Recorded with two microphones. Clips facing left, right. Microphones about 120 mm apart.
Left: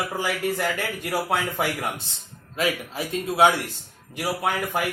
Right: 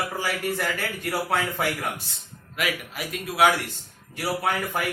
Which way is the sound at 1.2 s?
20° left (ahead or behind).